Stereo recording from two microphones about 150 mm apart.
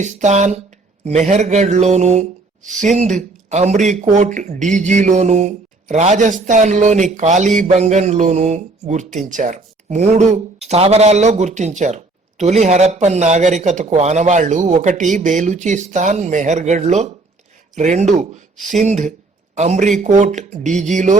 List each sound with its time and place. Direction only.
0.0 s speech: 55° right (ahead or behind)